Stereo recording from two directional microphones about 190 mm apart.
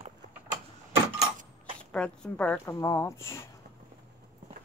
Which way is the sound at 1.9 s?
5° left (ahead or behind).